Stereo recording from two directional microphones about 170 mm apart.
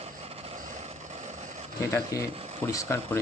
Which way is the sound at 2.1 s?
20° left (ahead or behind).